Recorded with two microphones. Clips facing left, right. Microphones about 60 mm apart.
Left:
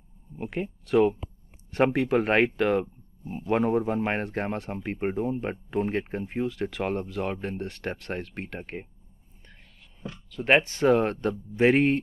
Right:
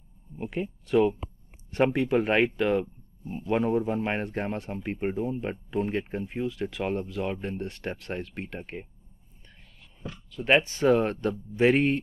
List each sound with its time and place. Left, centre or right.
0.4 s speech: left
10.3 s speech: left